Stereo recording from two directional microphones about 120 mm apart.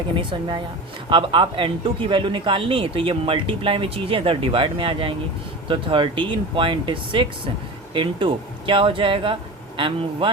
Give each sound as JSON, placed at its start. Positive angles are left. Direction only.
{"t": 0.2, "sound": "speech", "side_deg": -40}